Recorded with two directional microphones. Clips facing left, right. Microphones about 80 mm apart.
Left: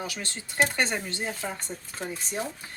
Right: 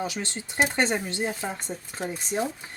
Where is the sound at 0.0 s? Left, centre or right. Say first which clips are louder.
Right 4 dB; right.